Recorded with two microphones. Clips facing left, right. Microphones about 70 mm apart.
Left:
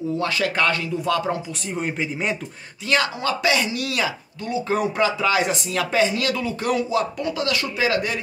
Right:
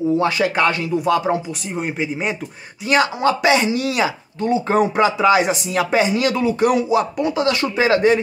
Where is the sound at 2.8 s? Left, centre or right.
Centre.